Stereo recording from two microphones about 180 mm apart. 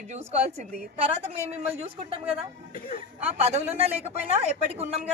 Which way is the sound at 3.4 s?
35° right (ahead or behind).